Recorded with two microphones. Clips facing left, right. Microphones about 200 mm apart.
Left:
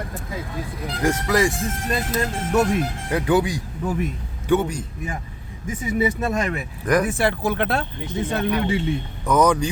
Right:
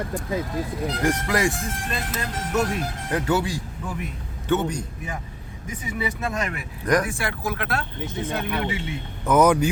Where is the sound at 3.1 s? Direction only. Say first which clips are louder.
Left 3 dB; 15° left (ahead or behind).